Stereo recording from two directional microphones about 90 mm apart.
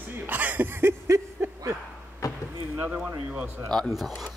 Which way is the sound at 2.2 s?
40° left (ahead or behind).